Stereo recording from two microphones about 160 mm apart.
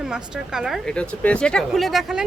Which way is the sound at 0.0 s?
5° right (ahead or behind).